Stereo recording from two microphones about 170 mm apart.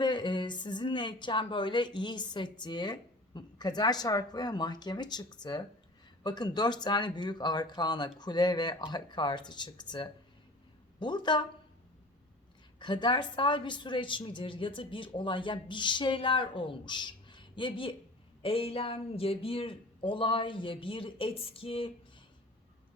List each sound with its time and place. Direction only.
0.0 s a woman's voice: 25° left (ahead or behind)
12.8 s a woman's voice: 25° left (ahead or behind)